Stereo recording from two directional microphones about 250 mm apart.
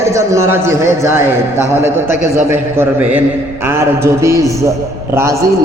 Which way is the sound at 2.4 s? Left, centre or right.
Centre.